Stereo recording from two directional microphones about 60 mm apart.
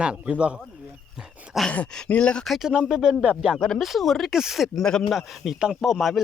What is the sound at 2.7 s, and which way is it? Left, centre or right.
Speech, centre.